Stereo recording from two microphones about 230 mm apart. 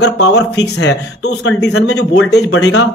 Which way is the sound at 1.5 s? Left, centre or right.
Left.